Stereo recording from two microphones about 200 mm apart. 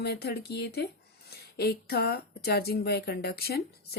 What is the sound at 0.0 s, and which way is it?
Speech, 55° left (ahead or behind).